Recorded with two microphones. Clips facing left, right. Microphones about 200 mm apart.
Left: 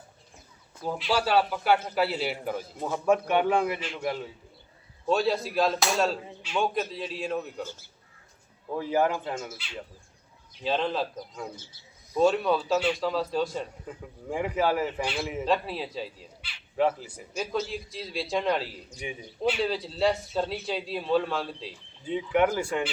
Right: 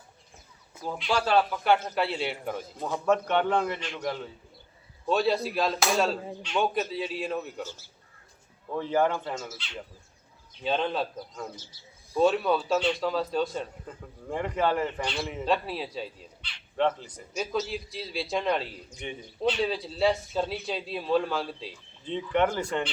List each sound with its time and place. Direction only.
0.9 s a man's voice: 5° left (ahead or behind)
8.7 s a man's voice: 10° left (ahead or behind)
10.6 s a man's voice: centre (ahead or behind)